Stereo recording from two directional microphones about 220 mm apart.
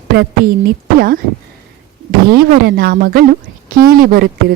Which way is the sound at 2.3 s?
45° right (ahead or behind).